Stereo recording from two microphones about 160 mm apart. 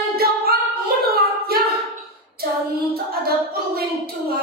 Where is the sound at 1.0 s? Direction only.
70° right (ahead or behind).